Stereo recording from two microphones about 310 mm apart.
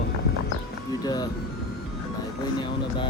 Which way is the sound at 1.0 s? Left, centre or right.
Centre.